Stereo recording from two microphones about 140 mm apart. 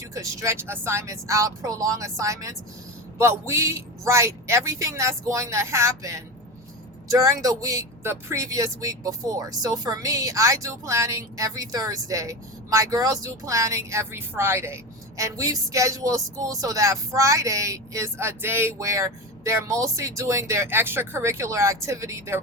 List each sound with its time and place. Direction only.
0.1 s speech: 20° right (ahead or behind)